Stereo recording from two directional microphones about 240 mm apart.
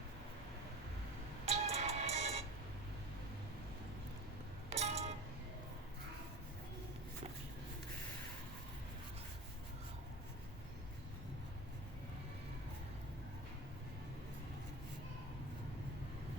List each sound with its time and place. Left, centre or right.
1.5 s music: right
4.7 s music: right